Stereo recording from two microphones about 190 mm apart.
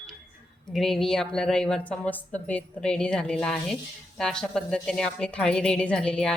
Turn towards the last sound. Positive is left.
turn(degrees=5)  # may be behind; listen again after turning